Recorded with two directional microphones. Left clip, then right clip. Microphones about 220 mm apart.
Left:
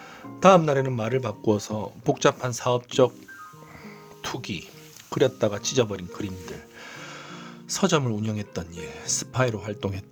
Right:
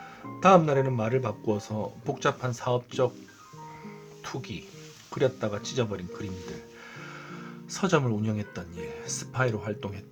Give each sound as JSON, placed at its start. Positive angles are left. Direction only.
{"t": 0.3, "sound": "speech", "side_deg": 50}
{"t": 4.2, "sound": "speech", "side_deg": 50}